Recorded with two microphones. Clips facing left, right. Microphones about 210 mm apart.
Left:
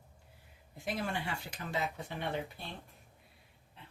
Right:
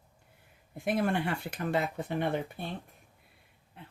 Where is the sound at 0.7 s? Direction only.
55° right (ahead or behind).